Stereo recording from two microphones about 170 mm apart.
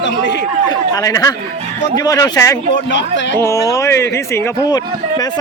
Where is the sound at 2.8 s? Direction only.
90° left.